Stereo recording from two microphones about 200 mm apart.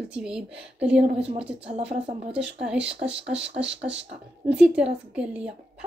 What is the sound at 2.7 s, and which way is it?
Speech, 65° right (ahead or behind).